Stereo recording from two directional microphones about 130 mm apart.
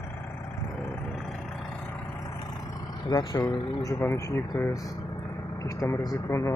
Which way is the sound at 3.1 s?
30° left (ahead or behind).